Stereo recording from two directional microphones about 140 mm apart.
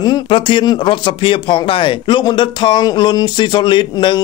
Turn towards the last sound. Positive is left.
turn(degrees=35)  # may be behind; listen again after turning